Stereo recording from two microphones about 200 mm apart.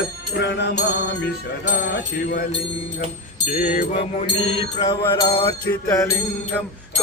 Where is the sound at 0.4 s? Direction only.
60° left (ahead or behind).